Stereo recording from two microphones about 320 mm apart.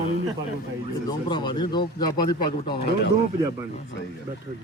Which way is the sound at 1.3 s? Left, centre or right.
Centre.